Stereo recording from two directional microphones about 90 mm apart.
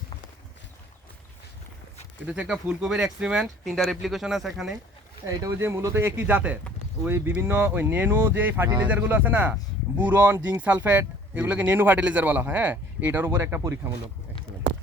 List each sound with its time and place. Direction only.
2.2 s speech: 15° right (ahead or behind)
5.2 s speech: 35° right (ahead or behind)